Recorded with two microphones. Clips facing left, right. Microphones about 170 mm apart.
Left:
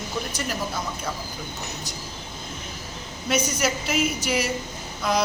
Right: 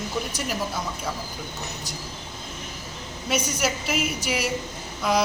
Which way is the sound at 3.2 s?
5° right (ahead or behind).